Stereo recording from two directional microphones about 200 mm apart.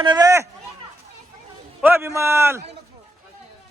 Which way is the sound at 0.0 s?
20° right (ahead or behind).